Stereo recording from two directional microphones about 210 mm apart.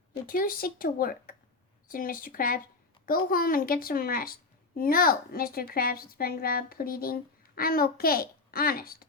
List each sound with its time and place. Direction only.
0.3 s a woman's voice: 45° left (ahead or behind)